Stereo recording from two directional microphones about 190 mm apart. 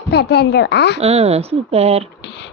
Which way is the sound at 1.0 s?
35° right (ahead or behind).